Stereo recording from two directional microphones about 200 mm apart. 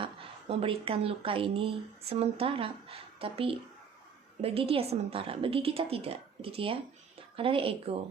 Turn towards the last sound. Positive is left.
turn(degrees=-30)  # may be behind; listen again after turning